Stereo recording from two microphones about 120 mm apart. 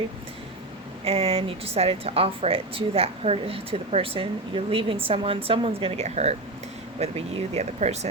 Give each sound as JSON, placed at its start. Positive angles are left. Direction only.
{"t": 1.0, "sound": "speech", "side_deg": -55}